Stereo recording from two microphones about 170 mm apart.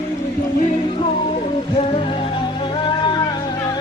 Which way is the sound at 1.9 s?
30° left (ahead or behind).